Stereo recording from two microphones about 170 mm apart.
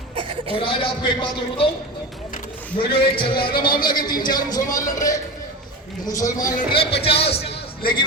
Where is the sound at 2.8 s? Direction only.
65° left (ahead or behind).